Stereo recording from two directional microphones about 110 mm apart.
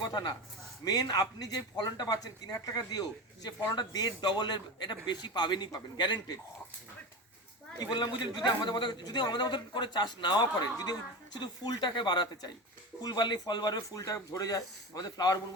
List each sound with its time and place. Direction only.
0.1 s a man's voice: 40° left (ahead or behind)
7.9 s speech: 40° left (ahead or behind)